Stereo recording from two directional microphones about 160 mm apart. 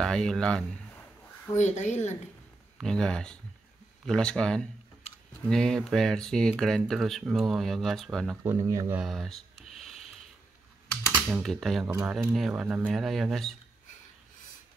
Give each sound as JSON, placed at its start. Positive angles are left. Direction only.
{"t": 0.0, "sound": "a sound", "side_deg": 5}
{"t": 1.5, "sound": "speech", "side_deg": 50}
{"t": 2.8, "sound": "speech", "side_deg": 5}
{"t": 8.5, "sound": "speech", "side_deg": -20}
{"t": 9.0, "sound": "a sound", "side_deg": 0}
{"t": 10.9, "sound": "typing", "side_deg": 5}
{"t": 11.2, "sound": "speech", "side_deg": -5}